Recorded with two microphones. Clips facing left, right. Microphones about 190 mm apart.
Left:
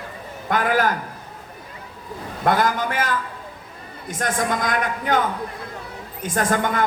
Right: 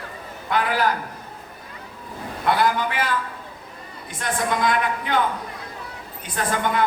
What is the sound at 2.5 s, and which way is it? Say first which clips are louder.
A man's voice: left 1 dB; 45° left (ahead or behind).